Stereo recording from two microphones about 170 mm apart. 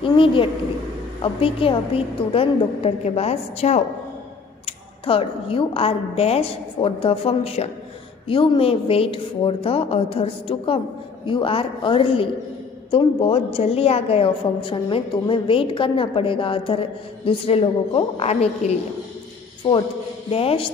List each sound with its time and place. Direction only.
0.0 s a woman's voice: 30° left (ahead or behind)
20.2 s a woman's voice: 35° left (ahead or behind)